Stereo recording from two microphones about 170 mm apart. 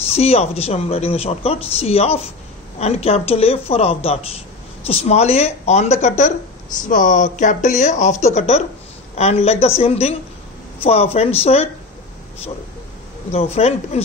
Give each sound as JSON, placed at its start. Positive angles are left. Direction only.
{"t": 0.1, "sound": "speech", "side_deg": 35}
{"t": 13.3, "sound": "speech", "side_deg": 35}